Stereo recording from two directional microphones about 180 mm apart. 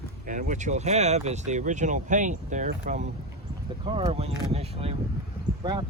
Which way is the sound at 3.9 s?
30° right (ahead or behind).